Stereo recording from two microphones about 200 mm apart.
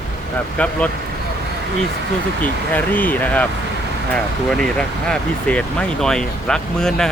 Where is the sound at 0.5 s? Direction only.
5° left (ahead or behind).